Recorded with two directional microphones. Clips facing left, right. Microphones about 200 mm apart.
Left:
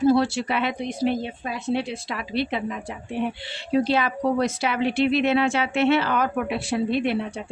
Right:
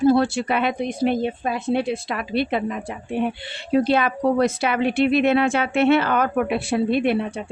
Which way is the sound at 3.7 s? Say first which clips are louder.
Right 3 dB; 55° right (ahead or behind).